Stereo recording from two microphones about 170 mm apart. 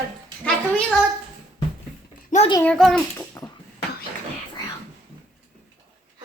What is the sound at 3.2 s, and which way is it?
Babbling, 20° left (ahead or behind).